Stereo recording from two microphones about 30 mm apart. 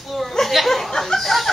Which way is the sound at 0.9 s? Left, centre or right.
Centre.